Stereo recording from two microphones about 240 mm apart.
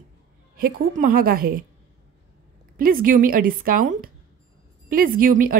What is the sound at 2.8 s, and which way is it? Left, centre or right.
A woman's voice, right.